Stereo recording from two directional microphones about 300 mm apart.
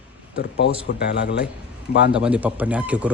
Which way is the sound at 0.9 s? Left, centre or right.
Left.